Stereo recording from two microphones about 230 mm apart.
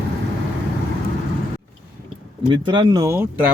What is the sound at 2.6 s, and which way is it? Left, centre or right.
Speech, centre.